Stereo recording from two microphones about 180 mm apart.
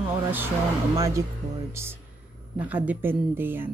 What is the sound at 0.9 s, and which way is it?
Speech, 20° right (ahead or behind).